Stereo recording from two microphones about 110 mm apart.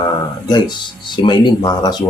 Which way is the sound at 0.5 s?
40° left (ahead or behind).